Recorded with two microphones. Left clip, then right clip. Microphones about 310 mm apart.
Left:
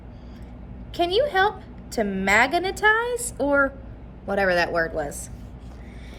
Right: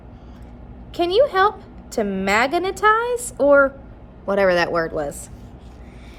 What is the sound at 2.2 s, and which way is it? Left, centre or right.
Speech, centre.